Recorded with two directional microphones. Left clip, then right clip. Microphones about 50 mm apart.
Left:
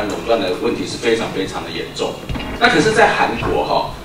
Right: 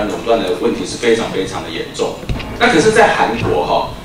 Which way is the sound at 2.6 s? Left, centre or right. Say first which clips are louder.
Right 2 dB; centre.